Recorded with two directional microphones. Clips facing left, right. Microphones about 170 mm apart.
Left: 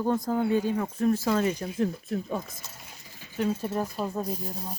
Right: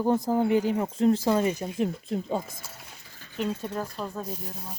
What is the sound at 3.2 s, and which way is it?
Speech, 10° left (ahead or behind).